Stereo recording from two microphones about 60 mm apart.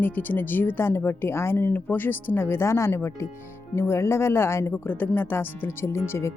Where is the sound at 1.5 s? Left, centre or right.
Left.